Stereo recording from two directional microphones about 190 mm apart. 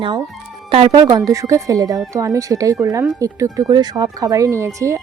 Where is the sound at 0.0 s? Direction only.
20° right (ahead or behind).